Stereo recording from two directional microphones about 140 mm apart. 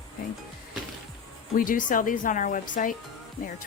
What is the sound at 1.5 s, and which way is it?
Speech, 80° left.